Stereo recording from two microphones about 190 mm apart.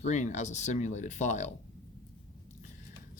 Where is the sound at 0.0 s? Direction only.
40° left (ahead or behind).